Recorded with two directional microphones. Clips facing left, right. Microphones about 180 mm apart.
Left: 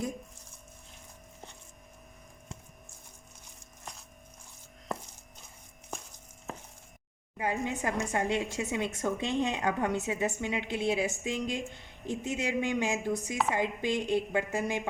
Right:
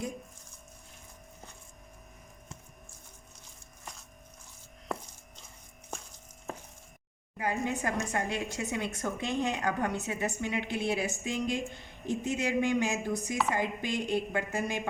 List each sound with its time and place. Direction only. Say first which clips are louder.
7.3 s speech: even; 20° left (ahead or behind)